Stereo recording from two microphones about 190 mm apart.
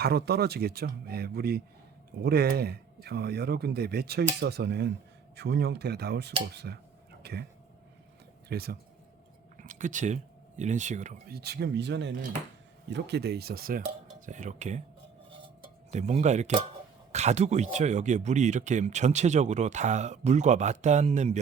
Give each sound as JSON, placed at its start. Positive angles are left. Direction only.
{"t": 0.0, "sound": "speech", "side_deg": -55}
{"t": 7.2, "sound": "a sound", "side_deg": -60}
{"t": 8.4, "sound": "speech", "side_deg": -55}
{"t": 9.6, "sound": "speech", "side_deg": -40}
{"t": 11.3, "sound": "speech", "side_deg": -60}
{"t": 14.3, "sound": "speech", "side_deg": -40}
{"t": 15.3, "sound": "cutlery", "side_deg": -25}
{"t": 17.1, "sound": "speech", "side_deg": -35}